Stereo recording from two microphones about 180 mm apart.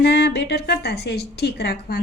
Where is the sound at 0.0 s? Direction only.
65° left (ahead or behind).